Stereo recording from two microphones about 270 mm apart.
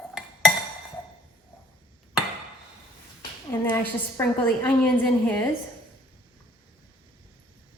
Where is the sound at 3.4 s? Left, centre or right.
Centre.